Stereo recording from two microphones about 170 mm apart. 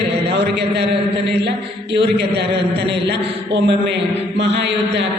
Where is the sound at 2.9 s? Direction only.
90° right.